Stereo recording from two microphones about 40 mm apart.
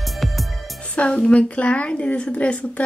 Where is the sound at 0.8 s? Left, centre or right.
Left.